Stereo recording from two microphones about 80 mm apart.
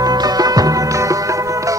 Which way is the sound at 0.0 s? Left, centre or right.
Right.